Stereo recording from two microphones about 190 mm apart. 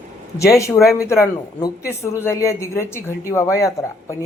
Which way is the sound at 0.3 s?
15° left (ahead or behind).